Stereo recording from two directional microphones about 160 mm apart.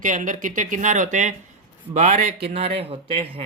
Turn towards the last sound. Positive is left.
turn(degrees=-35)  # may be behind; listen again after turning